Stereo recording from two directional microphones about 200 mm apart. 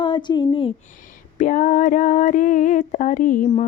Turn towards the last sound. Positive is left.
turn(degrees=40)  # may be behind; listen again after turning